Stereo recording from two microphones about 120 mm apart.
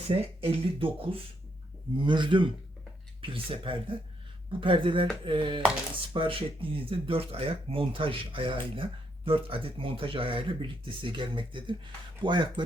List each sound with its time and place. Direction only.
0.2 s speech: 50° right (ahead or behind)